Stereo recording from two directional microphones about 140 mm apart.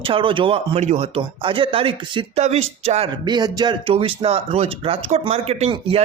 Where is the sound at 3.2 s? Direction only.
30° right (ahead or behind).